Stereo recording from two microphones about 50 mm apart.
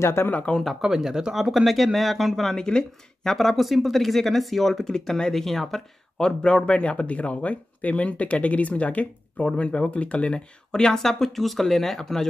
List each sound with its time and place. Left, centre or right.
0.0 s speech: left
0.3 s speech: left
0.7 s speech: centre
2.5 s speech: centre